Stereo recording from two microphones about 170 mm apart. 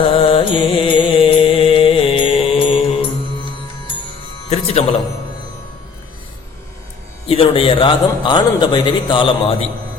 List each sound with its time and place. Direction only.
0.0 s music: 35° left (ahead or behind)
4.4 s music: 40° left (ahead or behind)
7.3 s a man's voice: 35° left (ahead or behind)